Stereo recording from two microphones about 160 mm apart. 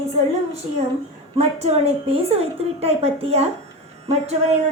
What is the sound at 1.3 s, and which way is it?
A woman's voice, 40° right (ahead or behind).